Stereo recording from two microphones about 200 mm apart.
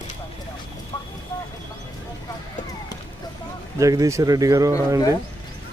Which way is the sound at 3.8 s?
15° right (ahead or behind).